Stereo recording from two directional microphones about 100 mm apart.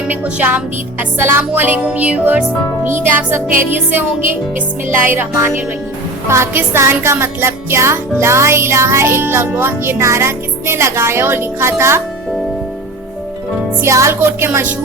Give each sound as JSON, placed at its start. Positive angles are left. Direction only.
{"t": 0.1, "sound": "speech", "side_deg": -15}
{"t": 1.2, "sound": "music", "side_deg": -20}
{"t": 1.9, "sound": "speech", "side_deg": -15}
{"t": 2.8, "sound": "music", "side_deg": -20}
{"t": 13.8, "sound": "music", "side_deg": -30}